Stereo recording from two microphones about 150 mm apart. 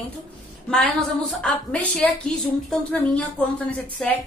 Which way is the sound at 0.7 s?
5° left (ahead or behind).